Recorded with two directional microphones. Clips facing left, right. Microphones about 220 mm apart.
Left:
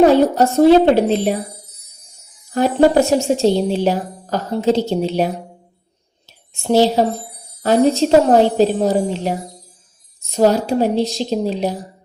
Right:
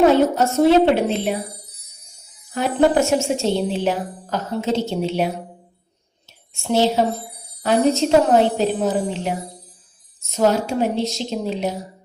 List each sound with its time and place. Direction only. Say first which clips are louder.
0.0 s a woman's voice: left 3 dB; 35° left (ahead or behind)
2.5 s a woman's voice: left 4 dB; 35° left (ahead or behind)
6.5 s a woman's voice: left 4 dB; 35° left (ahead or behind)